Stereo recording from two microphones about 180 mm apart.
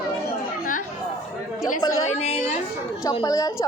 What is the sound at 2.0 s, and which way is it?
Speech, 35° left (ahead or behind).